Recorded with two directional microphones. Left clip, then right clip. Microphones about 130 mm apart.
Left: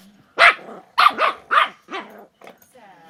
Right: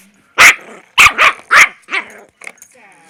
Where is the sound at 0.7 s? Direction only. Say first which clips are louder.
Right 8 dB; 15° left (ahead or behind).